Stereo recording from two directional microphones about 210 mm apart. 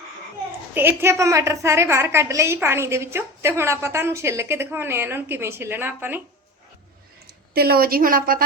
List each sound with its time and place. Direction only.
0.7 s a woman's voice: 10° right (ahead or behind)
7.3 s a woman's voice: 45° right (ahead or behind)